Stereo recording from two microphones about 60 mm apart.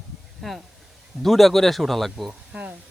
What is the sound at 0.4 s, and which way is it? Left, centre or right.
Speech, centre.